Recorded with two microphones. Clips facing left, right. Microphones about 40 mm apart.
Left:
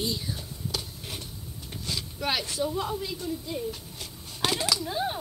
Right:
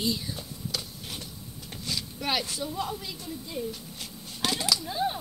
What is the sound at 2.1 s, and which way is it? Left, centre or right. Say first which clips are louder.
Speech: even; centre.